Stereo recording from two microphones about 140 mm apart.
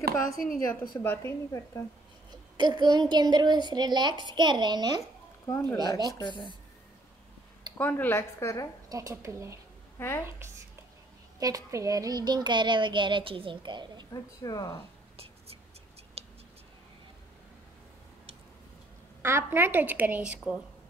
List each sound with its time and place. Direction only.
0.4 s a woman's voice: 85° left
1.0 s a woman's voice: 15° left (ahead or behind)
2.5 s a child's voice: 30° right (ahead or behind)
5.5 s a woman's voice: 15° left (ahead or behind)
6.1 s speech: 35° left (ahead or behind)
7.7 s speech: 15° left (ahead or behind)
8.8 s speech: 25° right (ahead or behind)
9.9 s a woman's voice: 15° left (ahead or behind)
11.3 s a child's voice: 25° right (ahead or behind)
14.1 s speech: 25° left (ahead or behind)
15.1 s whispering: 45° right (ahead or behind)
16.2 s a sound: 45° right (ahead or behind)
19.2 s a woman's voice: 15° right (ahead or behind)